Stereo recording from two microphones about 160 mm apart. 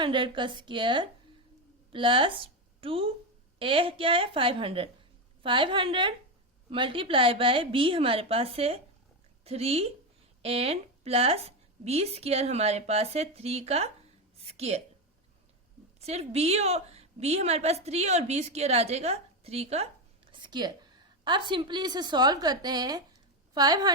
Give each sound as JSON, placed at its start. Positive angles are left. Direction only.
{"t": 0.0, "sound": "a woman's voice", "side_deg": -30}
{"t": 16.0, "sound": "a woman's voice", "side_deg": -40}
{"t": 20.3, "sound": "a woman's voice", "side_deg": -30}